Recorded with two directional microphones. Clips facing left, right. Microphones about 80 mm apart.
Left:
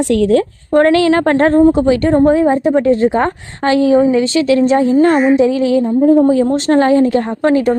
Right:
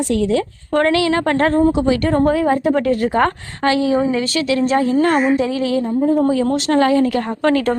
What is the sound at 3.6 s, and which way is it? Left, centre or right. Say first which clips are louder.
A woman's voice: left 5 dB; left.